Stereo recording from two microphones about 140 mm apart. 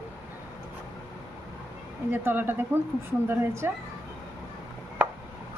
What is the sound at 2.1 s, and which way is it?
A woman's voice, 15° right (ahead or behind).